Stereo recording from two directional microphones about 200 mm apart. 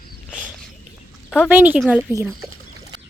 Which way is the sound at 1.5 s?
10° right (ahead or behind).